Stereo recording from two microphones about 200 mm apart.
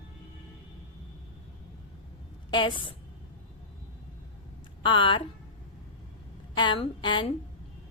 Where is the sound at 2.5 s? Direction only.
25° left (ahead or behind).